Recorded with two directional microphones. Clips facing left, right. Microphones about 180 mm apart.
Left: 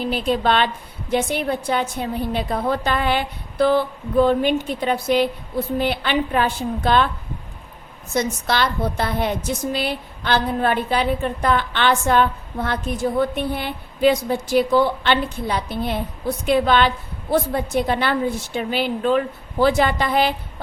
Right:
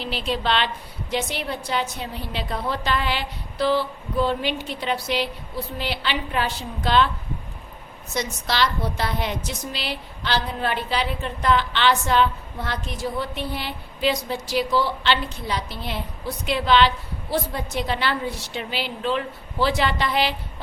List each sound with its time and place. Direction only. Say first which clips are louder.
0.0 s a woman's voice: left 6 dB; 50° left (ahead or behind)
8.1 s a woman's voice: left 5 dB; 50° left (ahead or behind)